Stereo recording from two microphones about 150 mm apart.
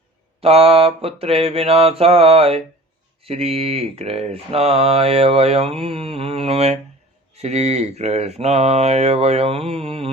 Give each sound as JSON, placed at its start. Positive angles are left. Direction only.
{"t": 0.4, "sound": "mantra", "side_deg": -40}